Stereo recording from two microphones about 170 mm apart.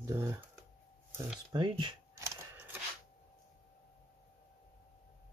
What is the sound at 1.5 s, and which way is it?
Shuffling cards, 25° right (ahead or behind).